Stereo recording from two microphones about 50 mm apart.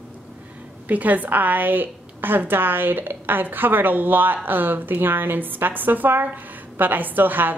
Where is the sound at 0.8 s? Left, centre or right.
Right.